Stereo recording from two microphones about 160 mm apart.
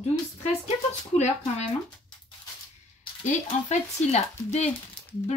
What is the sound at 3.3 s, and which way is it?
Speech, 45° left (ahead or behind).